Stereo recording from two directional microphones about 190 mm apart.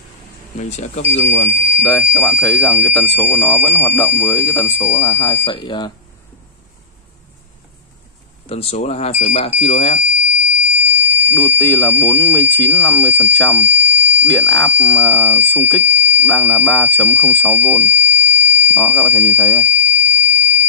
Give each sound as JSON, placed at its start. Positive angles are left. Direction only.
{"t": 0.6, "sound": "speech", "side_deg": 40}
{"t": 1.1, "sound": "speech", "side_deg": 70}
{"t": 1.5, "sound": "speech", "side_deg": 10}
{"t": 8.5, "sound": "speech", "side_deg": 30}
{"t": 10.2, "sound": "fire alarm", "side_deg": -10}
{"t": 11.3, "sound": "speech", "side_deg": 10}
{"t": 13.6, "sound": "speech", "side_deg": -10}
{"t": 14.2, "sound": "speech", "side_deg": 10}
{"t": 15.8, "sound": "fire alarm", "side_deg": -10}
{"t": 16.3, "sound": "speech", "side_deg": 10}
{"t": 18.8, "sound": "speech", "side_deg": 10}
{"t": 19.8, "sound": "fire alarm", "side_deg": -10}